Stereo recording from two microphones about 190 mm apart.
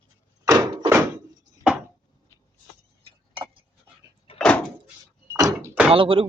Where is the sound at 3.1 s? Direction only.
30° right (ahead or behind).